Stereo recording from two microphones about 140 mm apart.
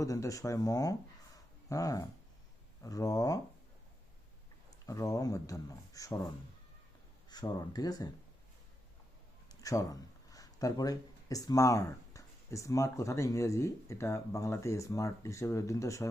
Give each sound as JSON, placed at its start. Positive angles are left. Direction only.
{"t": 0.0, "sound": "speech", "side_deg": 25}
{"t": 4.9, "sound": "speech", "side_deg": 20}
{"t": 9.5, "sound": "speech", "side_deg": 25}